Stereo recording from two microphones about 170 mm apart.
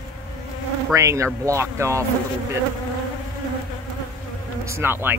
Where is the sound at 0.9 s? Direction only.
15° right (ahead or behind).